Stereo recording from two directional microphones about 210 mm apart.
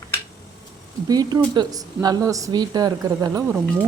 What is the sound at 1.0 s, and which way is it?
A woman's voice, 20° right (ahead or behind).